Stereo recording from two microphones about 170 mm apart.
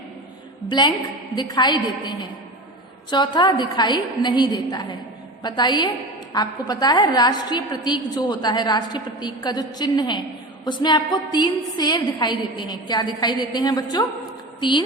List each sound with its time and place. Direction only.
0.7 s a woman's voice: 25° left (ahead or behind)